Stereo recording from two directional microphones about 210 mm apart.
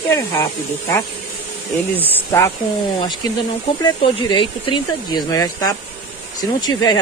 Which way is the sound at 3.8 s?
20° left (ahead or behind).